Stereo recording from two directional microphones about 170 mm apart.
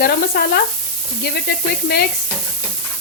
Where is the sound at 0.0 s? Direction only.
65° left (ahead or behind).